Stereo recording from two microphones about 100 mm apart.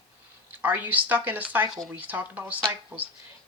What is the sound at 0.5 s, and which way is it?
Speech, 20° right (ahead or behind).